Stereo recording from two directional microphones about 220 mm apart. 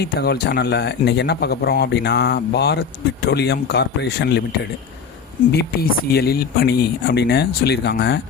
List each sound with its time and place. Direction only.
0.0 s speech: 45° left (ahead or behind)
5.5 s speech: 45° left (ahead or behind)